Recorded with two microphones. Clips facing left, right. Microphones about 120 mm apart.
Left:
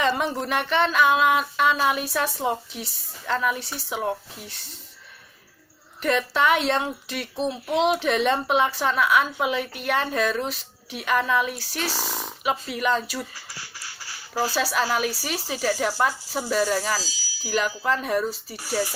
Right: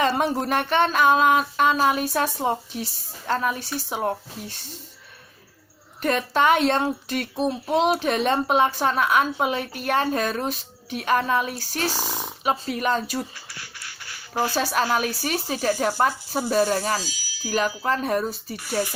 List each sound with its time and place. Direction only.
0.0 s a child's voice: 45° right (ahead or behind)
6.0 s a child's voice: 45° right (ahead or behind)
11.9 s a sound: 10° right (ahead or behind)
12.4 s a child's voice: 40° right (ahead or behind)
14.5 s speech: 45° right (ahead or behind)